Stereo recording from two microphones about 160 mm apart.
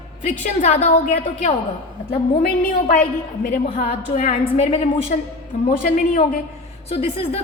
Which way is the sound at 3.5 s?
45° left (ahead or behind).